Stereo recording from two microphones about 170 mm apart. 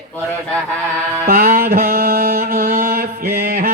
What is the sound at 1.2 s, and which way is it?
Mantra, 65° right (ahead or behind).